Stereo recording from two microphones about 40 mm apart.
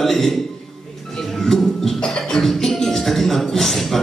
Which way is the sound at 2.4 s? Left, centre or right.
Centre.